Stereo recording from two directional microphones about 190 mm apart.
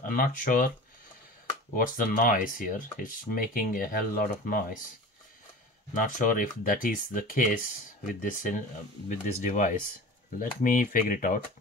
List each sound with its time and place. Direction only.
0.0 s speech: 45° left (ahead or behind)
1.8 s speech: 45° left (ahead or behind)
5.9 s speech: 45° left (ahead or behind)